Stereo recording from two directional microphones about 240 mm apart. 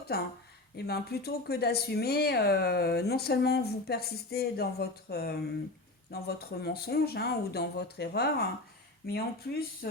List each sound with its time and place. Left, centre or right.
0.1 s speech: left